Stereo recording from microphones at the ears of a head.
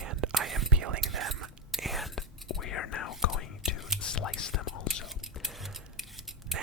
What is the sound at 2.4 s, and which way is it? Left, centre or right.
Whispering, left.